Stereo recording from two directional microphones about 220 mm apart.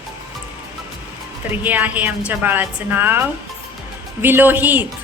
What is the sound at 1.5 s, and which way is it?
A woman's voice, 10° right (ahead or behind).